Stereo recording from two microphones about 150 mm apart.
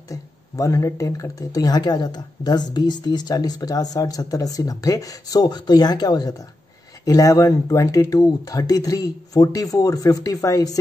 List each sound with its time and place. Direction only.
0.1 s speech: 20° left (ahead or behind)